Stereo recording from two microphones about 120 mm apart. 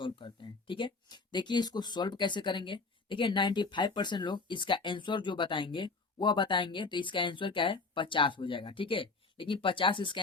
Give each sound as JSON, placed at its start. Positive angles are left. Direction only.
{"t": 0.0, "sound": "speech", "side_deg": 45}